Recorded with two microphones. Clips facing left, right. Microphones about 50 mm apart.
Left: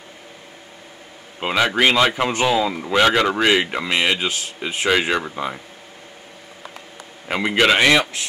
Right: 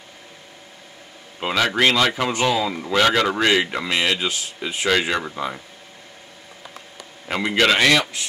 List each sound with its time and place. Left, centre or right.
1.4 s speech: centre
7.2 s a man's voice: centre